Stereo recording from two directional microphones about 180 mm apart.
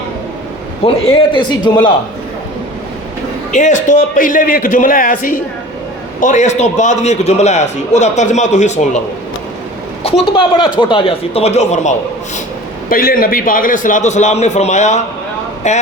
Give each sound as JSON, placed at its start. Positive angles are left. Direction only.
{"t": 0.9, "sound": "a man's voice", "side_deg": 30}
{"t": 3.5, "sound": "a man's voice", "side_deg": 45}
{"t": 10.3, "sound": "a man's voice", "side_deg": 25}
{"t": 12.9, "sound": "a man's voice", "side_deg": 55}